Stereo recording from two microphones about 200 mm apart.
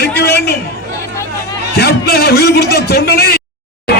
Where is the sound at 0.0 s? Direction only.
50° left (ahead or behind).